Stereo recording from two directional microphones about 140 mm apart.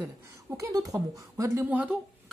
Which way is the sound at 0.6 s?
25° right (ahead or behind).